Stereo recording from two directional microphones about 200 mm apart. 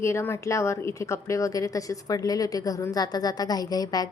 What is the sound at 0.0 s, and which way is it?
A woman's voice, 15° left (ahead or behind).